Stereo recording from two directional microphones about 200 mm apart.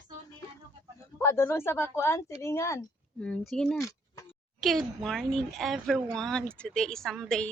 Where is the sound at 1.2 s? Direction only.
10° left (ahead or behind).